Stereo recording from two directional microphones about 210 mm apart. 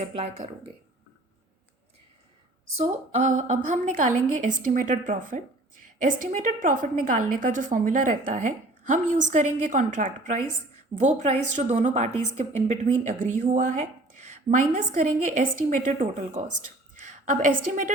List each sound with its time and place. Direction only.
0.0 s speech: 30° right (ahead or behind)
2.8 s a woman's voice: 35° right (ahead or behind)